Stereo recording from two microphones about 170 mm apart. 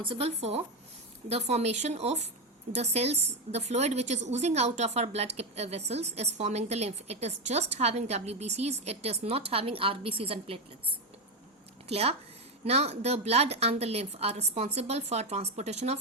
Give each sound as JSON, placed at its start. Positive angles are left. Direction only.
{"t": 0.1, "sound": "a woman's voice", "side_deg": -35}
{"t": 11.9, "sound": "a woman's voice", "side_deg": -35}